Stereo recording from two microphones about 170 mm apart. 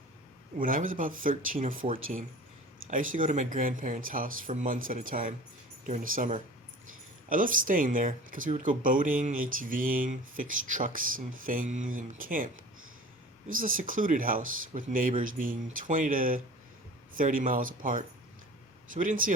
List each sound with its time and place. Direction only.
0.6 s speech: 55° right (ahead or behind)
13.5 s speech: 55° right (ahead or behind)